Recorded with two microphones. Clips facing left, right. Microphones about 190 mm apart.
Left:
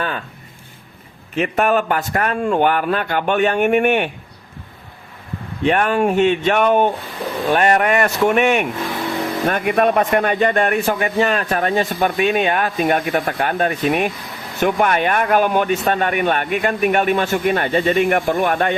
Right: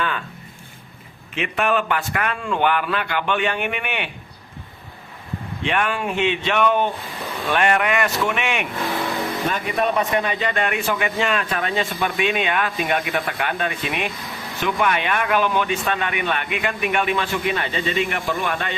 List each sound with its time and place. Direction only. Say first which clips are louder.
1.4 s speech: left 5 dB; 45° left (ahead or behind)
5.6 s speech: left 7 dB; 40° left (ahead or behind)
9.5 s speech: left 7 dB; 55° left (ahead or behind)